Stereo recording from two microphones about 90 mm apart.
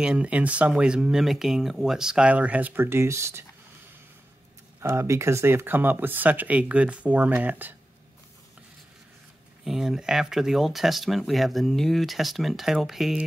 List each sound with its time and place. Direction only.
0.0 s speech: 10° right (ahead or behind); by 3.4 s 30° right (ahead or behind)
4.8 s speech: 30° right (ahead or behind)
9.7 s speech: 5° right (ahead or behind)